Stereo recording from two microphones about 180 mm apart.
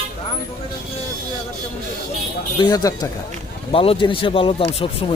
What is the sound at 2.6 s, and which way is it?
A man's voice, 20° left (ahead or behind).